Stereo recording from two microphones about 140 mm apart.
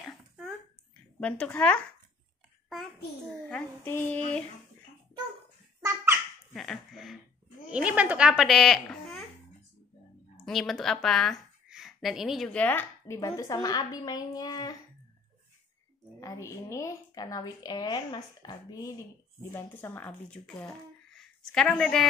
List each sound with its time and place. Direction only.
1.2 s speech: 10° left (ahead or behind)
3.4 s child singing: 5° left (ahead or behind)
3.9 s speech: 15° left (ahead or behind)
6.5 s a child's voice: centre (ahead or behind)
10.4 s speech: centre (ahead or behind)
12.5 s speech: 10° left (ahead or behind)
13.2 s a woman's voice: 25° left (ahead or behind)
16.2 s a woman's voice: 20° left (ahead or behind)
19.5 s speech: 15° left (ahead or behind)